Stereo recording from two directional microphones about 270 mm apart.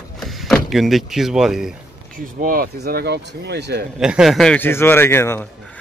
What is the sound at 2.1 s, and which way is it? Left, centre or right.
Speech, right.